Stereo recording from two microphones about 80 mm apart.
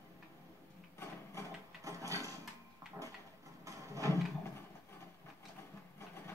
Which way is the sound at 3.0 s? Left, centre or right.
Right.